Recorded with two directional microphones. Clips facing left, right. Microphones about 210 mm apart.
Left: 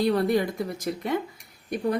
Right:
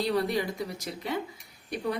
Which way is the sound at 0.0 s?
50° left (ahead or behind).